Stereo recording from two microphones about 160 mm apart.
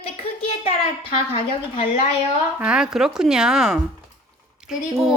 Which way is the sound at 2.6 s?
5° right (ahead or behind).